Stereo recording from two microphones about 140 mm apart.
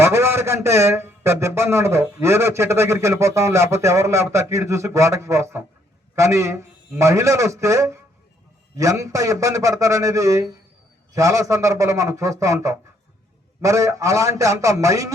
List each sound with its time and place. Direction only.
0.0 s a man's voice: 20° right (ahead or behind)